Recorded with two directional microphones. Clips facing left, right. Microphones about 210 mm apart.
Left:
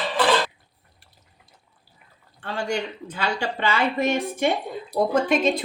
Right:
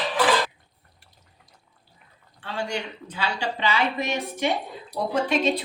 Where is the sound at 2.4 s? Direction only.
50° left (ahead or behind).